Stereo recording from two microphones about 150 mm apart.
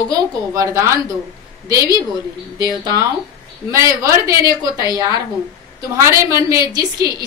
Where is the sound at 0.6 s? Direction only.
20° right (ahead or behind).